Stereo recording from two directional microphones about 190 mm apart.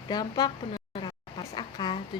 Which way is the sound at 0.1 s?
20° left (ahead or behind).